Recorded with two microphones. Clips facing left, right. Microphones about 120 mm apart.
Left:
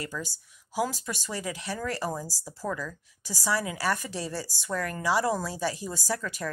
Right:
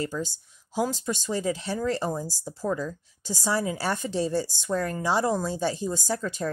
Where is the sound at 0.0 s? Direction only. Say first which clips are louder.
Right 6 dB; 25° right (ahead or behind).